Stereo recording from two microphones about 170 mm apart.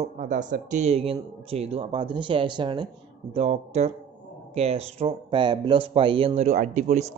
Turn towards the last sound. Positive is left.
turn(degrees=-45)  # may be behind; listen again after turning